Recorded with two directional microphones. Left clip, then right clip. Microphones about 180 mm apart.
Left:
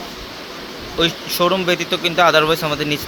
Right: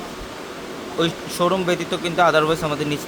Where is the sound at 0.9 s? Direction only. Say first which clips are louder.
Left 4 dB; 10° left (ahead or behind).